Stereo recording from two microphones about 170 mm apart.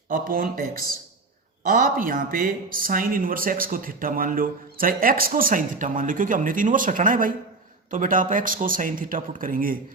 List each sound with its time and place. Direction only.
0.1 s speech: 55° right (ahead or behind)